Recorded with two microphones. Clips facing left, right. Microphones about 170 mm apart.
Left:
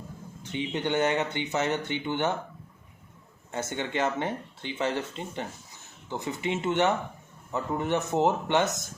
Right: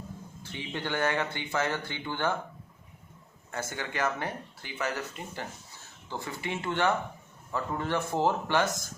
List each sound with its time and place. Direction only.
0.4 s speech: 20° left (ahead or behind)
3.5 s speech: 25° left (ahead or behind)